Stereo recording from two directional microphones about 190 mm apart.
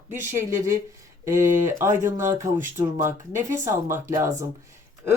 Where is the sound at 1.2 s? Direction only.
15° right (ahead or behind).